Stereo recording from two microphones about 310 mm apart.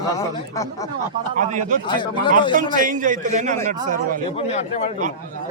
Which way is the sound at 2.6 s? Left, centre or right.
Right.